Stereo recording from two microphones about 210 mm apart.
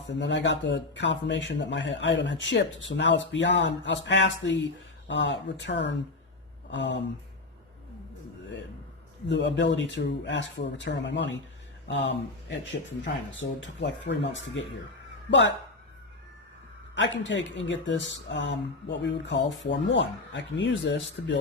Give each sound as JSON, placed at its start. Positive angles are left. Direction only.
{"t": 0.1, "sound": "speech", "side_deg": 60}
{"t": 9.2, "sound": "speech", "side_deg": 55}
{"t": 13.6, "sound": "speech", "side_deg": 60}
{"t": 16.9, "sound": "speech", "side_deg": 60}